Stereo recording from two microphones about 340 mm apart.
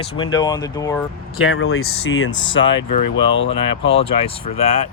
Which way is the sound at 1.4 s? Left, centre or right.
Left.